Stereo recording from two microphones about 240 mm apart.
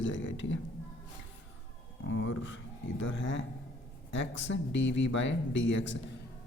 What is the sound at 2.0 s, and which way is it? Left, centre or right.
Speech, left.